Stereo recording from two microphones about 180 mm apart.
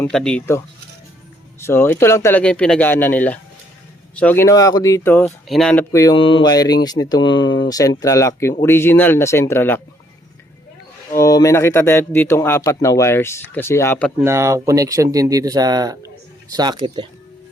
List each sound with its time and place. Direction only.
0.0 s speech: 5° left (ahead or behind)
1.6 s speech: 10° left (ahead or behind)
5.2 s speech: centre (ahead or behind)
5.9 s speech: 15° left (ahead or behind)
6.1 s speech: 30° left (ahead or behind); by 9.8 s 10° left (ahead or behind)
11.2 s speech: 20° left (ahead or behind)
14.2 s speech: 15° right (ahead or behind)